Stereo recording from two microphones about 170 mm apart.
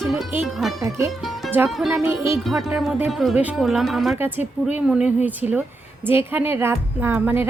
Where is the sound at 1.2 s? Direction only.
Centre (ahead or behind).